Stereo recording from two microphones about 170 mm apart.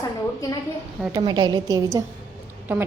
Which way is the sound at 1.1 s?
25° right (ahead or behind).